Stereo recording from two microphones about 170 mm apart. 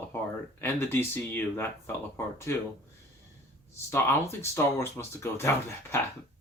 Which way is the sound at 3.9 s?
15° left (ahead or behind).